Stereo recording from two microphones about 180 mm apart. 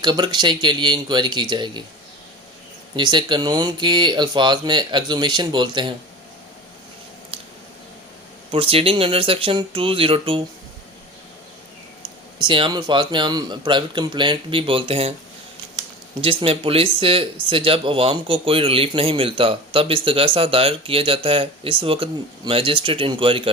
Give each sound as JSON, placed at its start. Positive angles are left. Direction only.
{"t": 0.0, "sound": "speech", "side_deg": -25}
{"t": 2.9, "sound": "speech", "side_deg": -25}
{"t": 8.4, "sound": "speech", "side_deg": -30}
{"t": 12.4, "sound": "speech", "side_deg": -25}
{"t": 16.2, "sound": "speech", "side_deg": -30}